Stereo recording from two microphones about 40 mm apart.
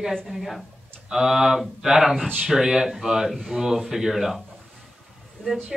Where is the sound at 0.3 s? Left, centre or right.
Centre.